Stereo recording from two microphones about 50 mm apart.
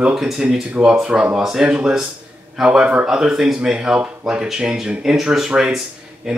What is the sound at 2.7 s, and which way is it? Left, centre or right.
Speech, right.